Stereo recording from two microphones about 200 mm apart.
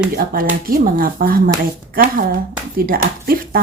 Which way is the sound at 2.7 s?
45° right (ahead or behind).